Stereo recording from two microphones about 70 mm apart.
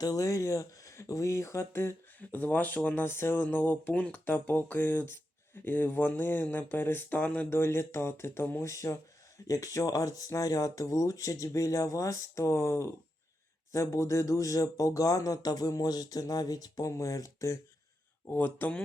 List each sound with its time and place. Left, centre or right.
0.0 s speech: left; by 7.4 s centre
7.5 s speech: left
8.6 s speech: left
16.9 s speech: left
18.3 s speech: left